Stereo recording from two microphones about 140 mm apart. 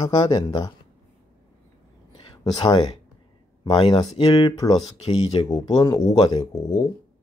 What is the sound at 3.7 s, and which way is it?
Speech, 30° left (ahead or behind).